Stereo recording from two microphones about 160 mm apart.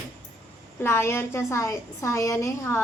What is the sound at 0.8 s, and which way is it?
Speech, 15° left (ahead or behind).